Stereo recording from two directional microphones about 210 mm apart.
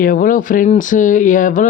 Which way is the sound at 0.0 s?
40° left (ahead or behind).